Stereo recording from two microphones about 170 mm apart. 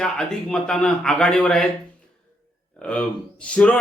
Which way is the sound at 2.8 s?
5° left (ahead or behind).